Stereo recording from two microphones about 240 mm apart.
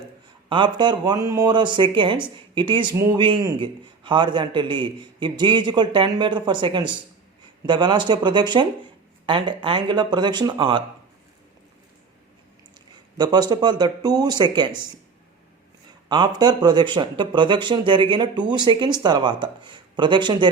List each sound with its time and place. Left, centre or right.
0.4 s a man's voice: centre
13.1 s speech: centre
16.0 s a man's voice: centre